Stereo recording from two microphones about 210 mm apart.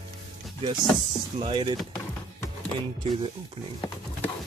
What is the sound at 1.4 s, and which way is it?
Speech, 25° right (ahead or behind).